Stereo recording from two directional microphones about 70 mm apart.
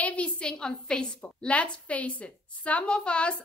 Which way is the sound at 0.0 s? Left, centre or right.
Centre.